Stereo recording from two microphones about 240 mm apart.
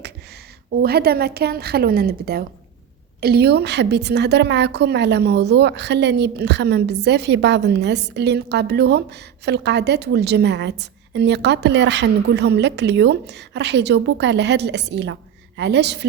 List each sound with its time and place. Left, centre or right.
0.7 s a woman's voice: right